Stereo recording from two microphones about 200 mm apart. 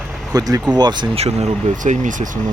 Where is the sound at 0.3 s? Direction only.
15° right (ahead or behind).